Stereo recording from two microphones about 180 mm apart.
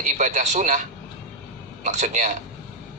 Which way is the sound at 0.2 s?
45° right (ahead or behind).